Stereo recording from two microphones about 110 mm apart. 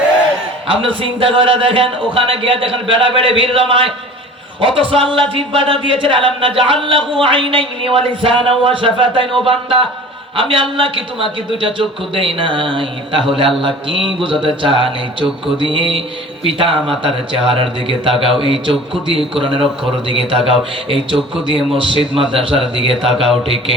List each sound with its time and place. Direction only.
0.7 s speech: 55° right (ahead or behind)
21.7 s speech: 55° right (ahead or behind)